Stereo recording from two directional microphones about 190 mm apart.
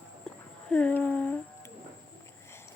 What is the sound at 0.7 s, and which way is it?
Speech, 5° left (ahead or behind).